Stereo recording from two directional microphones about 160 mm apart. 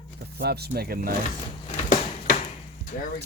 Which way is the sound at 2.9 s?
55° left (ahead or behind).